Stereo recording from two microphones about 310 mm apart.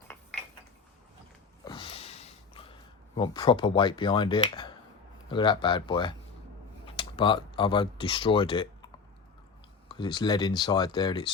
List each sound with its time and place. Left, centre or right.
1.6 s a sound: centre
3.2 s speech: centre
9.9 s speech: centre